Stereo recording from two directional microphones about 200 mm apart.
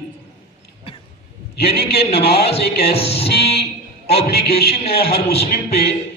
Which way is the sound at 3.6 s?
55° left (ahead or behind).